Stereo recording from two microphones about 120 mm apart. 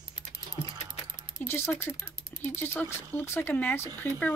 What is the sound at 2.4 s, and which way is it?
Speech, 20° left (ahead or behind).